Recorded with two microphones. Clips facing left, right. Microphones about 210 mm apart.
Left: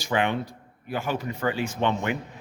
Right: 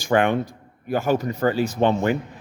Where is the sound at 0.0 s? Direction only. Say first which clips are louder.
Right 6 dB; 50° right (ahead or behind).